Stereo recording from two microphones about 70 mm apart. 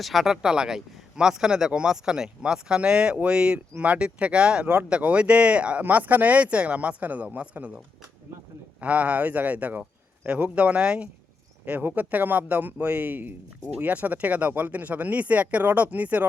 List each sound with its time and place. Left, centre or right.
0.0 s speech: centre
8.8 s speech: right